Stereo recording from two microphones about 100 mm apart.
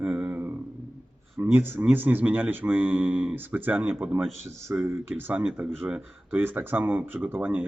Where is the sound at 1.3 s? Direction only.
20° right (ahead or behind).